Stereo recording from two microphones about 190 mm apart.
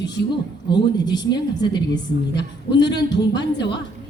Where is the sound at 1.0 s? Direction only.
20° left (ahead or behind).